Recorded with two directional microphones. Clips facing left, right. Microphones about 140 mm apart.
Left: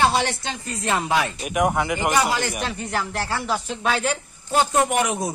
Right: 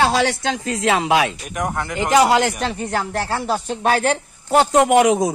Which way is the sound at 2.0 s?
90° right.